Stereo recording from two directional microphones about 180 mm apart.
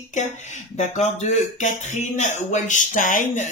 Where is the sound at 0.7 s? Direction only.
40° left (ahead or behind).